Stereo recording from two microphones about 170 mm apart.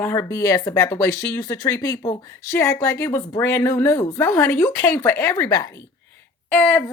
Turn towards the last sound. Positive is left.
turn(degrees=10)  # may be behind; listen again after turning